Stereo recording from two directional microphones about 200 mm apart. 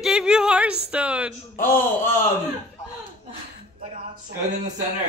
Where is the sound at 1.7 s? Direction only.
45° left (ahead or behind).